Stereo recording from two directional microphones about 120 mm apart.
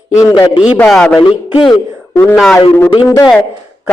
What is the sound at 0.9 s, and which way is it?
Speech, 5° left (ahead or behind).